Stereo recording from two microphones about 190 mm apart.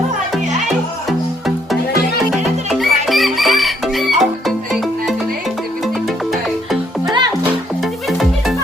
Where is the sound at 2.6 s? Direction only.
Centre (ahead or behind).